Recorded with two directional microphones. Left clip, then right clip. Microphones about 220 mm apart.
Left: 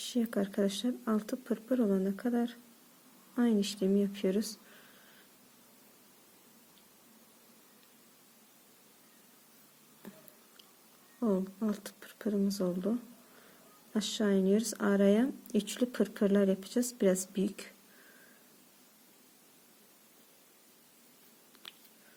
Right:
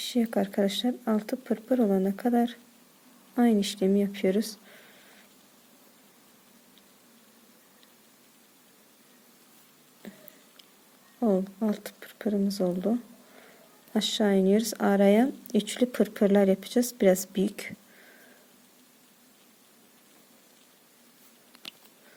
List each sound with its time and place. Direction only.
0.0 s speech: 20° right (ahead or behind)
11.2 s speech: 20° right (ahead or behind)
21.6 s biting: 30° right (ahead or behind)